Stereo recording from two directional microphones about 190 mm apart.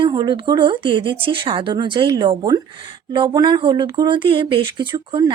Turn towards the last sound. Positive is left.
turn(degrees=-25)  # may be behind; listen again after turning